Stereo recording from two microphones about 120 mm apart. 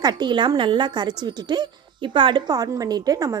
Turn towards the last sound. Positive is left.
turn(degrees=-30)  # may be behind; listen again after turning